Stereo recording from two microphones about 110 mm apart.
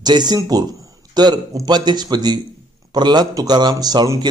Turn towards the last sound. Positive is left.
turn(degrees=-40)  # may be behind; listen again after turning